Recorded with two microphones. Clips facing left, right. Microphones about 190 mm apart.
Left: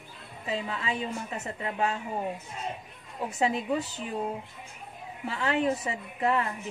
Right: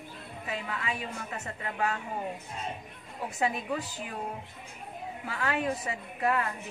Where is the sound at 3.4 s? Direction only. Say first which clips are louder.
Left 3 dB; 25° left (ahead or behind).